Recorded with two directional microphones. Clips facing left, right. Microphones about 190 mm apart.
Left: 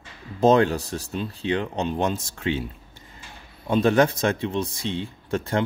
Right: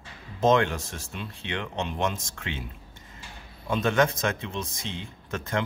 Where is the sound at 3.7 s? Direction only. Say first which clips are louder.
Left 5 dB; 30° left (ahead or behind).